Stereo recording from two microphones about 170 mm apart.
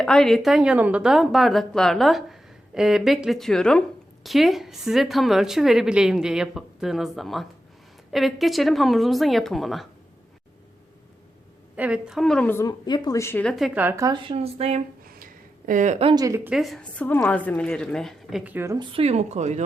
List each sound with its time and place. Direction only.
0.0 s a woman's voice: 5° left (ahead or behind)
11.8 s a woman's voice: 5° right (ahead or behind); by 14.8 s 35° right (ahead or behind)
15.0 s a sound: 55° right (ahead or behind); by 16.1 s 40° right (ahead or behind)
16.1 s speech: 20° right (ahead or behind)
16.5 s a woman's voice: centre (ahead or behind)
18.8 s speech: 30° right (ahead or behind)